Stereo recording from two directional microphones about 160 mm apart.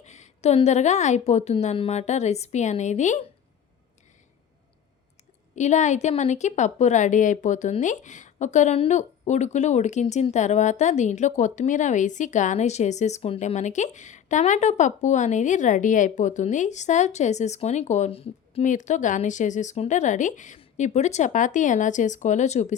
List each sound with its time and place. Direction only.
0.0 s a woman's voice: 45° left (ahead or behind)
5.5 s a woman's voice: 50° left (ahead or behind)